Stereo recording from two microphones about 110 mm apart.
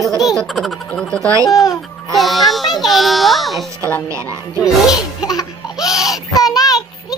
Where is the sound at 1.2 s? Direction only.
30° right (ahead or behind).